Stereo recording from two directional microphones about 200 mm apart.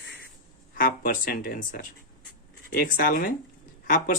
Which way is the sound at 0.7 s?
45° left (ahead or behind).